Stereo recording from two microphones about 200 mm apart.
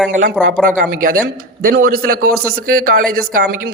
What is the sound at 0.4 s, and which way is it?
A woman's voice, 45° right (ahead or behind).